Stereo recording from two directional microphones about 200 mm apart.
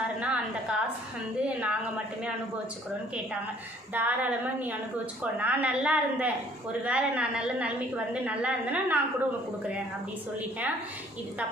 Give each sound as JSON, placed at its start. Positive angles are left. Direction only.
{"t": 0.2, "sound": "a woman's voice", "side_deg": -5}
{"t": 3.9, "sound": "a woman's voice", "side_deg": -10}